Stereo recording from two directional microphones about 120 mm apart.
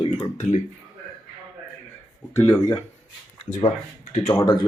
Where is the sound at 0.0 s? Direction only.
35° left (ahead or behind).